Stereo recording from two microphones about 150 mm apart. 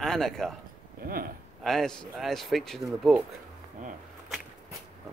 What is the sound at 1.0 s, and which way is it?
Speech, 75° right (ahead or behind).